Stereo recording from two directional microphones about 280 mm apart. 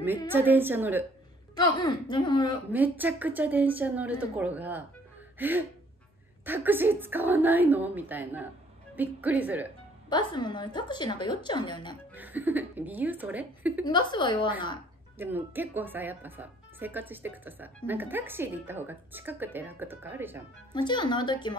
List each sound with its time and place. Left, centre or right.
0.3 s speech: centre
1.5 s a woman's voice: centre
2.7 s speech: centre
10.0 s a woman's voice: centre
12.1 s speech: centre
13.8 s a woman's voice: centre
15.1 s speech: centre
20.7 s a woman's voice: centre